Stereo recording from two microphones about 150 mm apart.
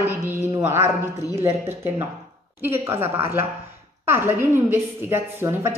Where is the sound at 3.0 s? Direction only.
15° right (ahead or behind).